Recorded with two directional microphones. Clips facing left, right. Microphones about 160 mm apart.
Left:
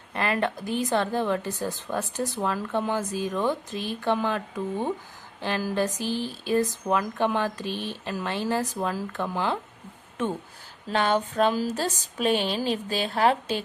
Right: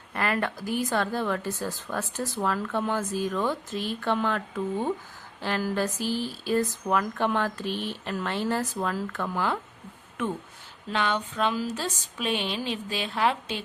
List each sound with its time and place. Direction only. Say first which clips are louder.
0.1 s speech: left 2 dB; 20° left (ahead or behind)
5.4 s a sound: left 1 dB; 15° left (ahead or behind)
6.4 s speech: left 2 dB; 20° left (ahead or behind)
7.7 s speech: right 1 dB; 15° right (ahead or behind)
8.0 s speech: even; 15° left (ahead or behind)
10.9 s speech: left 4 dB; 40° left (ahead or behind)